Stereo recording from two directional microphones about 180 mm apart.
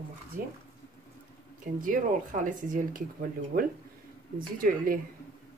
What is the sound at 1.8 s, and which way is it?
Speech, 50° right (ahead or behind).